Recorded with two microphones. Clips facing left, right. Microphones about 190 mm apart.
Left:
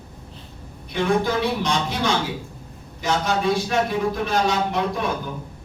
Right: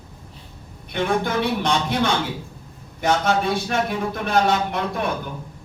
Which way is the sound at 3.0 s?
55° right (ahead or behind).